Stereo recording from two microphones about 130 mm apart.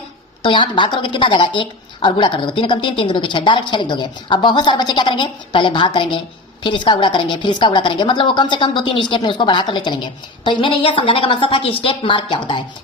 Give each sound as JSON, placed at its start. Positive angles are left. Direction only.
{"t": 0.4, "sound": "a woman's voice", "side_deg": 40}